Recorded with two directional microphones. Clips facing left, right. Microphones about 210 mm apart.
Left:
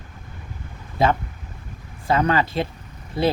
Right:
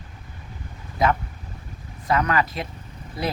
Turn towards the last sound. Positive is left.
turn(degrees=25)  # may be behind; listen again after turning